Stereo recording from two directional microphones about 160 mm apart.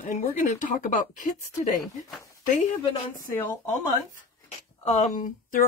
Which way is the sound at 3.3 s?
15° left (ahead or behind).